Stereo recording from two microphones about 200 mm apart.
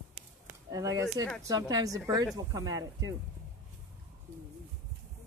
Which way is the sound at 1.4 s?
20° right (ahead or behind).